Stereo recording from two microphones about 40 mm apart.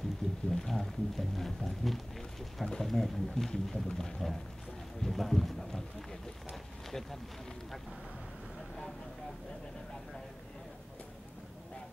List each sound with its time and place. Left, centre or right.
0.5 s speech: centre
2.6 s speech: centre
6.9 s speech: centre